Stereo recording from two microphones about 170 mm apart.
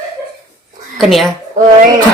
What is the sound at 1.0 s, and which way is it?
Speech, centre (ahead or behind).